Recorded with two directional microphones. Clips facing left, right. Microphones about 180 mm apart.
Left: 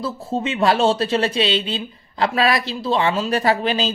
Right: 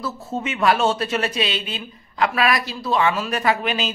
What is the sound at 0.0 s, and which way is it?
A man's voice, 30° left (ahead or behind).